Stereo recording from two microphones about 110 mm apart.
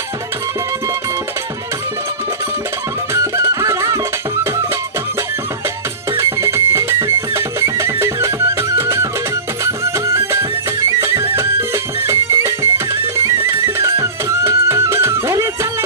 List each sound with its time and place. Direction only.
3.1 s music: 25° right (ahead or behind)
6.1 s music: 25° right (ahead or behind)